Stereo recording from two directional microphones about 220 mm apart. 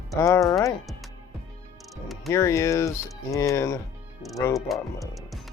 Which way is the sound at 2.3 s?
15° left (ahead or behind).